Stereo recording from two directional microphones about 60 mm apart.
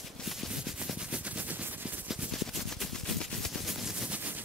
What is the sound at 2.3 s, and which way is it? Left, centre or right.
Gunshot, centre.